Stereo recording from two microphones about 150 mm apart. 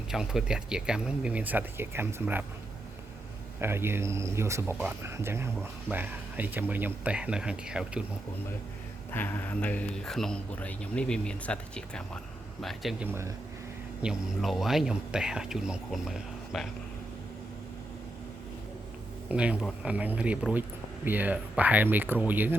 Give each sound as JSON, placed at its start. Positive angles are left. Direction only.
{"t": 0.1, "sound": "speech", "side_deg": -5}
{"t": 3.6, "sound": "speech", "side_deg": -15}
{"t": 9.1, "sound": "speech", "side_deg": 10}
{"t": 13.1, "sound": "speech", "side_deg": -20}
{"t": 14.0, "sound": "speech", "side_deg": -5}
{"t": 19.3, "sound": "speech", "side_deg": -10}